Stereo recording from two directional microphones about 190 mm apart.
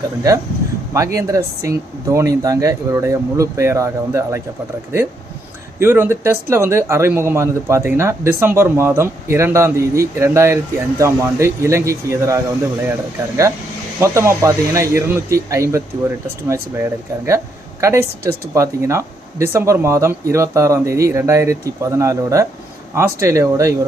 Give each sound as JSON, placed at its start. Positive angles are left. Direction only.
{"t": 0.9, "sound": "a man's voice", "side_deg": -15}
{"t": 5.8, "sound": "a man's voice", "side_deg": -10}
{"t": 14.0, "sound": "a man's voice", "side_deg": -15}